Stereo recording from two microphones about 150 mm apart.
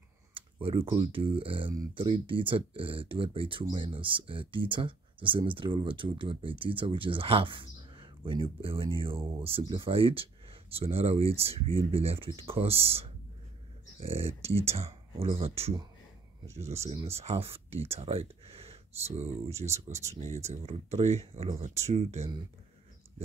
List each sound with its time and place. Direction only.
0.3 s computer keyboard: 35° right (ahead or behind)
1.1 s speech: 35° right (ahead or behind)
19.9 s speech: 20° right (ahead or behind)
20.4 s speech: 45° right (ahead or behind)